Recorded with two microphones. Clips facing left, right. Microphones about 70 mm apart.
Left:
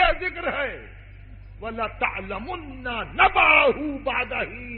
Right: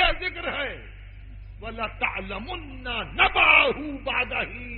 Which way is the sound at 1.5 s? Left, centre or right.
Centre.